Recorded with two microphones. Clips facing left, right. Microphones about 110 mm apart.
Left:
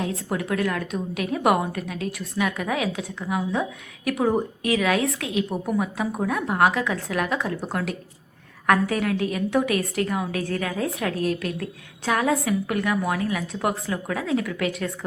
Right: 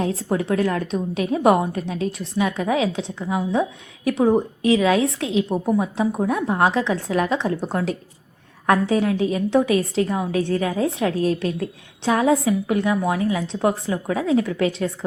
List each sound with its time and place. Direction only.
0.0 s a woman's voice: 30° right (ahead or behind)
4.2 s a woman's voice: centre (ahead or behind)
4.6 s a woman's voice: 25° right (ahead or behind)